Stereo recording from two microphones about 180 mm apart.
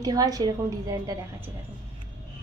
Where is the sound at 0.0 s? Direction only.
20° right (ahead or behind).